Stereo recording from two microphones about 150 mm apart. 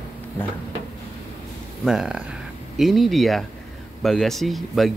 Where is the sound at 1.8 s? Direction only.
5° right (ahead or behind).